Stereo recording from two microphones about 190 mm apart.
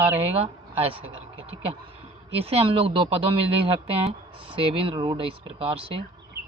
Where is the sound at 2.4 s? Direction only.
30° right (ahead or behind).